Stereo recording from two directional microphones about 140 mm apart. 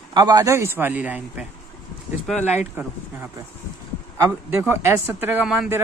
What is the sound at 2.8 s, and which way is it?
Speech, 15° right (ahead or behind).